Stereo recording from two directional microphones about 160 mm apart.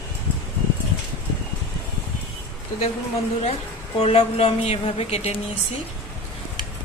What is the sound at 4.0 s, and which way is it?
A woman's voice, 40° left (ahead or behind).